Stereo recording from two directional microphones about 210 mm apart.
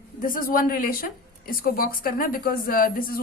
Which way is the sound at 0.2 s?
40° left (ahead or behind).